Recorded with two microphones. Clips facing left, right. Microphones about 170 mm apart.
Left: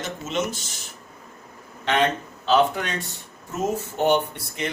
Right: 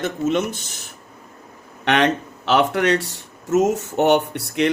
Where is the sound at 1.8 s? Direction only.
75° right (ahead or behind).